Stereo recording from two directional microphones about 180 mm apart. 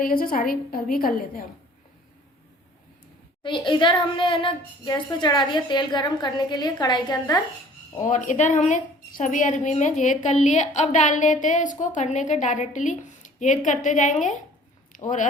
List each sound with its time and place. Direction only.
0.0 s a woman's voice: 50° left (ahead or behind)
3.4 s a woman's voice: 25° left (ahead or behind)
8.0 s a woman's voice: 45° left (ahead or behind)